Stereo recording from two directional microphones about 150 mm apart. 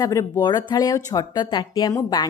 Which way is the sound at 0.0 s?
20° left (ahead or behind).